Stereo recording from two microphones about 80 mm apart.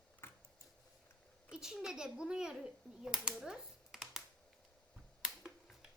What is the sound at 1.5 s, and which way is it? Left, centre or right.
A child's voice, centre.